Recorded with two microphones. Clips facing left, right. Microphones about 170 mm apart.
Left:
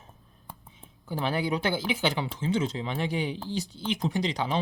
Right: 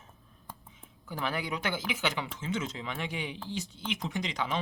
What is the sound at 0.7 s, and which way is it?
Speech, 30° left (ahead or behind).